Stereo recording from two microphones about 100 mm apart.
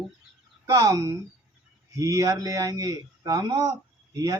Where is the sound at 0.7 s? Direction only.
35° right (ahead or behind).